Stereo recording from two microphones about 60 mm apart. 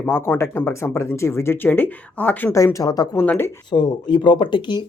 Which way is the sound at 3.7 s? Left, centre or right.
Left.